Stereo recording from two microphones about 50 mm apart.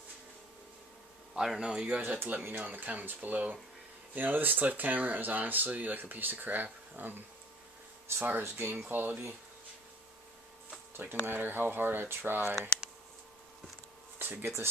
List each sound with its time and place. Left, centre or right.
1.3 s speech: centre
1.6 s speech: centre
1.9 s speech: right
8.2 s speech: right
11.2 s speech: right
14.1 s a sound: right